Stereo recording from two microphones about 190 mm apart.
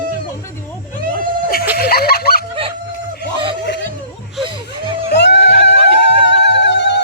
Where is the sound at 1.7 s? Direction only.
55° left (ahead or behind).